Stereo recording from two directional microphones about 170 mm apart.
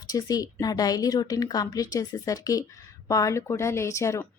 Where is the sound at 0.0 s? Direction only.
20° left (ahead or behind).